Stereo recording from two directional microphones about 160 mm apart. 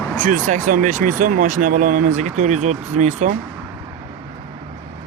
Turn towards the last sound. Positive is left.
turn(degrees=-50)  # may be behind; listen again after turning